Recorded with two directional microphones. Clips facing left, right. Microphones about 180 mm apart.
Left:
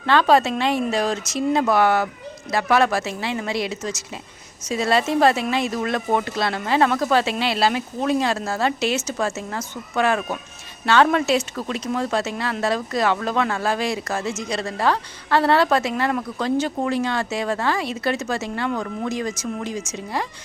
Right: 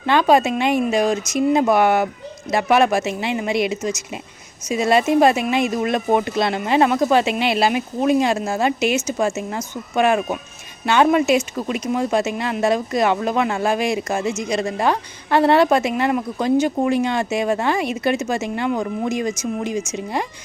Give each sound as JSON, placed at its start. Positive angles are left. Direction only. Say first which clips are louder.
{"t": 0.0, "sound": "speech", "louder": "right 1 dB", "side_deg": -15}